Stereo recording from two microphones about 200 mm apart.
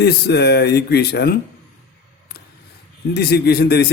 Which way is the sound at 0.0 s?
55° left (ahead or behind).